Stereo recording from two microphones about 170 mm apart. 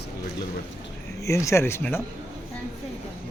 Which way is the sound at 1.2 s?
15° left (ahead or behind).